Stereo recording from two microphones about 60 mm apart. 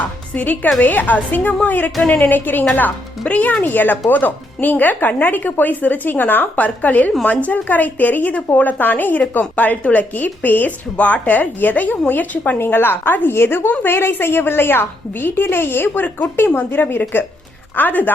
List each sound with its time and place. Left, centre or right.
0.3 s a woman's voice: left
12.5 s a woman's voice: left